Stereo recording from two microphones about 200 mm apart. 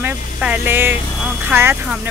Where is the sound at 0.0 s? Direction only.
10° right (ahead or behind).